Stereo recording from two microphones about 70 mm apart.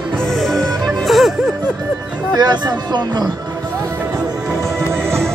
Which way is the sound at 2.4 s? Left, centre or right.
Right.